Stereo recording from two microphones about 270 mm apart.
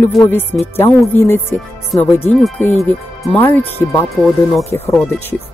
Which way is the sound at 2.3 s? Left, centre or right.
Centre.